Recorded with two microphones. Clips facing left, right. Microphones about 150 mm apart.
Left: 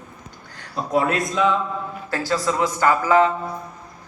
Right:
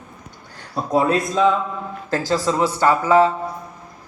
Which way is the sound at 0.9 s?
30° right (ahead or behind).